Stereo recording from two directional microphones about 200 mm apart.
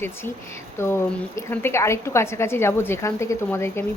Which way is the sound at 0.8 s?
10° left (ahead or behind).